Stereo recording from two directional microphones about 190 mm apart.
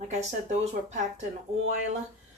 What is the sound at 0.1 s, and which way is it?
Speech, 35° right (ahead or behind).